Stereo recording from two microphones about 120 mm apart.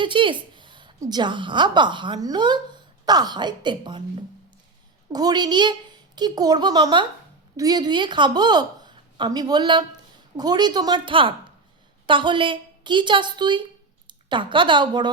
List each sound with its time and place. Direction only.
0.0 s a woman's voice: 45° right (ahead or behind)
5.1 s a woman's voice: 35° right (ahead or behind)